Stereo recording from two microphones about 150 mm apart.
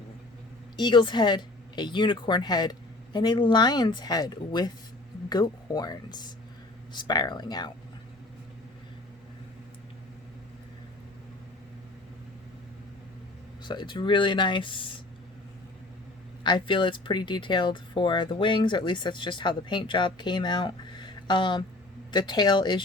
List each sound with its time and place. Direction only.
0.8 s speech: 30° left (ahead or behind)
13.7 s speech: 30° left (ahead or behind)
16.4 s speech: 30° left (ahead or behind)